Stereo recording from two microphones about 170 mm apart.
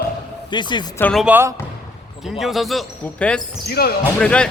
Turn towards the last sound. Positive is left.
turn(degrees=5)  # may be behind; listen again after turning